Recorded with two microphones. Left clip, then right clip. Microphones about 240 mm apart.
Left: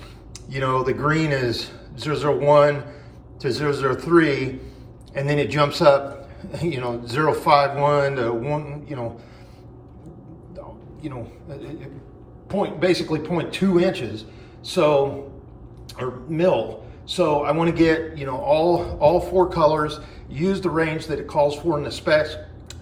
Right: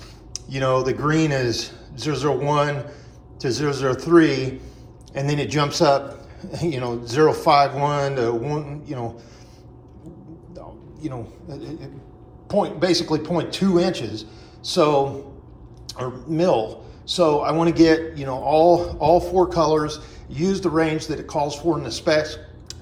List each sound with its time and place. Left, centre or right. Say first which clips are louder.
0.5 s speech: right 1 dB; centre
11.0 s speech: right 2 dB; centre